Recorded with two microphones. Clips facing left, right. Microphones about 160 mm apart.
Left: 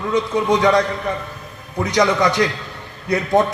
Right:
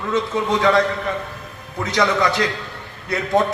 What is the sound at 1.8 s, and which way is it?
Speech, 20° left (ahead or behind).